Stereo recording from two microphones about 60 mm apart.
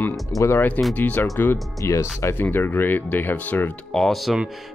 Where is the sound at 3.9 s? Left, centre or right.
Centre.